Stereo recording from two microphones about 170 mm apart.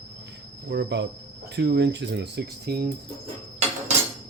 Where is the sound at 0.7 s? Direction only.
90° right; by 2.9 s 65° right (ahead or behind).